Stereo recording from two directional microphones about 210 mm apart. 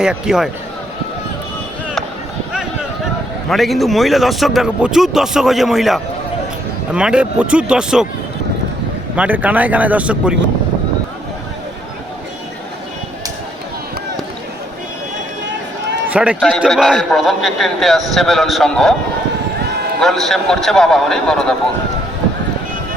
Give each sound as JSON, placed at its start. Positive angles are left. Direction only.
{"t": 0.0, "sound": "a man's voice", "side_deg": -5}
{"t": 3.5, "sound": "a man's voice", "side_deg": 0}
{"t": 9.1, "sound": "speech", "side_deg": -5}
{"t": 16.0, "sound": "a man's voice", "side_deg": -5}
{"t": 20.0, "sound": "a man's voice", "side_deg": 0}